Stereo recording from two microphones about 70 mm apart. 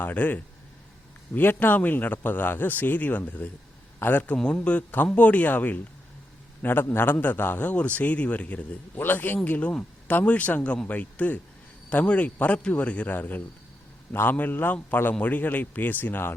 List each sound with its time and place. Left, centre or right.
0.0 s speech: left
4.4 s a man's voice: centre; by 16.3 s left